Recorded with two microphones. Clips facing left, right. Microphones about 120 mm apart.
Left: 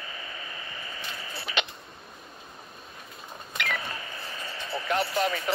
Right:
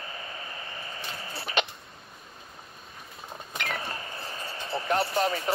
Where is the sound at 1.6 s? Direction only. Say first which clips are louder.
Right 3 dB; 45° right (ahead or behind).